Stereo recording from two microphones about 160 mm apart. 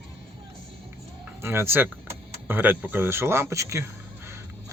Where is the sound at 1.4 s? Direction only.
15° right (ahead or behind).